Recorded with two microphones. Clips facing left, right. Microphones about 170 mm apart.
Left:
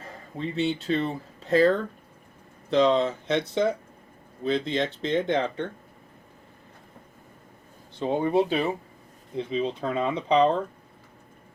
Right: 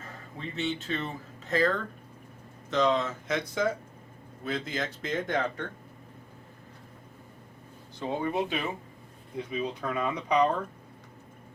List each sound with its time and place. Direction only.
0.0 s speech: 35° left (ahead or behind)
7.9 s speech: 30° left (ahead or behind)